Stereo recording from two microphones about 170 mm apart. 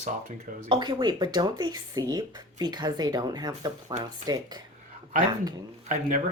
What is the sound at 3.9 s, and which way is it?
Speech, 40° right (ahead or behind).